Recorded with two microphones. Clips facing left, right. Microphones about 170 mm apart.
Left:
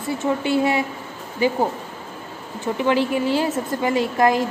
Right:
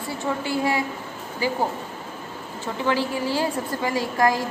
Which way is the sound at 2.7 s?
20° left (ahead or behind).